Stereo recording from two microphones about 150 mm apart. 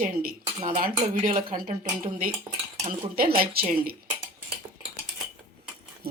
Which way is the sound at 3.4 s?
90° right.